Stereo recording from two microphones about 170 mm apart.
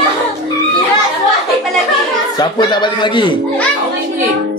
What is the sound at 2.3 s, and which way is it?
A man's voice, 25° left (ahead or behind).